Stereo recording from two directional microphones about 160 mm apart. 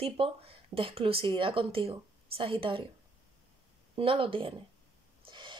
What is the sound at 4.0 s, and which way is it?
Speech, 35° right (ahead or behind).